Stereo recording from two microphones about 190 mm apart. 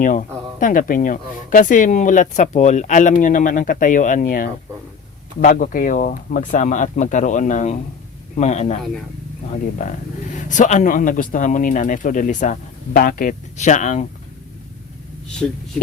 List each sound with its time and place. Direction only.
0.0 s speech: 45° left (ahead or behind)
9.8 s speech: 40° left (ahead or behind)
15.3 s speech: 5° left (ahead or behind)